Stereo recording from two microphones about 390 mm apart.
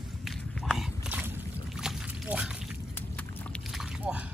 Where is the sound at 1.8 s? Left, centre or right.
Centre.